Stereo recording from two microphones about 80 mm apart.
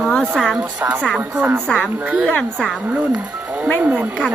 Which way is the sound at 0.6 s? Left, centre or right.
Centre.